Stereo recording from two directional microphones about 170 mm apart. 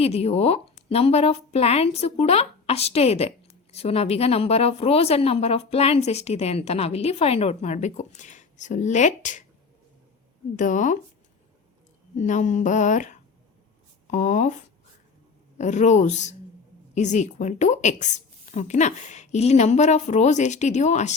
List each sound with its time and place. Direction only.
0.0 s a woman's voice: 35° left (ahead or behind)
10.6 s a woman's voice: 50° left (ahead or behind)
12.1 s a woman's voice: 45° left (ahead or behind)
15.5 s a woman's voice: 45° left (ahead or behind)